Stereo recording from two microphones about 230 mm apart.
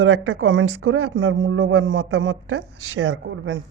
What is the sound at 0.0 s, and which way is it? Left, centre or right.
Speech, right.